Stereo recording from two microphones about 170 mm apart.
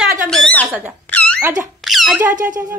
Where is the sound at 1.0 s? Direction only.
10° left (ahead or behind).